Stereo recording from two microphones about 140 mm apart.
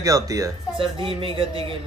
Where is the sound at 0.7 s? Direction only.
35° right (ahead or behind).